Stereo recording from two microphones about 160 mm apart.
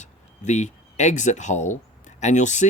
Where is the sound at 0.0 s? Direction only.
45° left (ahead or behind).